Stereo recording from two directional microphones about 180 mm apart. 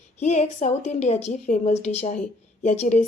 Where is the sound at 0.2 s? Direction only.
40° left (ahead or behind).